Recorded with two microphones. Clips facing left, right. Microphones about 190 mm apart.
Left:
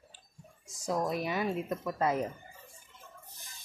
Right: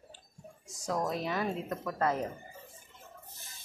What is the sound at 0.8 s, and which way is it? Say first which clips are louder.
Speech: left 1 dB; 10° left (ahead or behind).